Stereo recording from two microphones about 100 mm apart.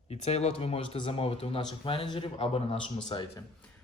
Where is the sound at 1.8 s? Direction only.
60° left (ahead or behind).